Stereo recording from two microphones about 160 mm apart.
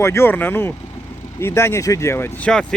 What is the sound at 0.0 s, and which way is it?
Speech, 15° left (ahead or behind).